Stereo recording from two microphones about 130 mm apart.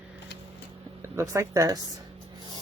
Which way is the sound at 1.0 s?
20° right (ahead or behind).